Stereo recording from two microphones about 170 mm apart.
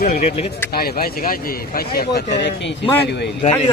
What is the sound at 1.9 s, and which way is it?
Speech, 80° left.